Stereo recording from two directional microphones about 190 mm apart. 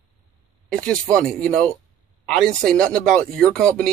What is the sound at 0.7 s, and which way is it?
Speech, 5° left (ahead or behind).